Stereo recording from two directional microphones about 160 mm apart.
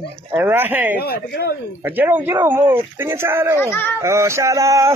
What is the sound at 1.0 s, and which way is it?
Speech, 80° left.